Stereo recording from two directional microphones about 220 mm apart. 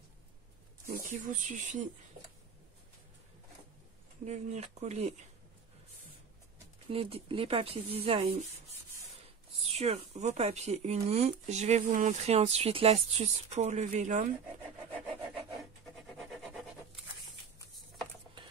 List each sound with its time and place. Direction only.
0.8 s speech: 35° right (ahead or behind)
4.3 s speech: 30° right (ahead or behind)
6.9 s speech: 25° right (ahead or behind)
9.7 s speech: 30° right (ahead or behind)
14.9 s wood: 5° left (ahead or behind)